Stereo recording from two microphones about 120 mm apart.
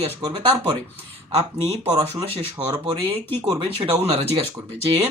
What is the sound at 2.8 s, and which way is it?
Speech, 50° right (ahead or behind).